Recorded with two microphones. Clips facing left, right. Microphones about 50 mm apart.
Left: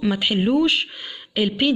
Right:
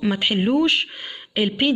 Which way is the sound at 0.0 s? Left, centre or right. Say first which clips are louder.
Even; right.